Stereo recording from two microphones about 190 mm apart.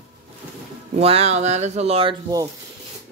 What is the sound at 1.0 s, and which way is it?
Speech, 30° right (ahead or behind).